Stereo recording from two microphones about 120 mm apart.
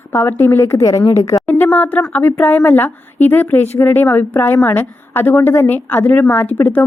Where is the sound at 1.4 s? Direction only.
15° left (ahead or behind).